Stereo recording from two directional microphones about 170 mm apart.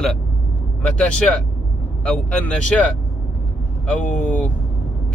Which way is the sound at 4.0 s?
45° left (ahead or behind).